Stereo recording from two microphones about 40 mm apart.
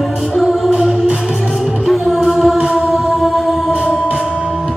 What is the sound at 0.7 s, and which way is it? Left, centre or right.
Music, right.